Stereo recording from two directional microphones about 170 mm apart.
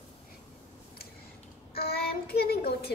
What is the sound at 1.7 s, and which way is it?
Child singing, 65° left (ahead or behind).